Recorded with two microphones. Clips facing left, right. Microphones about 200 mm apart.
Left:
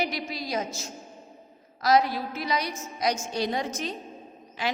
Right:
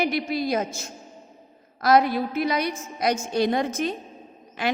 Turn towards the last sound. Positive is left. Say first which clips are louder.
# right 4 dB
turn(degrees=-55)  # may be behind; listen again after turning